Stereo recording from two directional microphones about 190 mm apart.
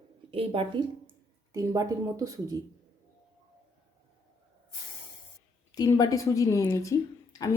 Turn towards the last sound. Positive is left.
turn(degrees=15)  # may be behind; listen again after turning